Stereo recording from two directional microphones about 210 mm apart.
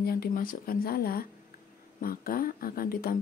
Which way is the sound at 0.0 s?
45° left (ahead or behind).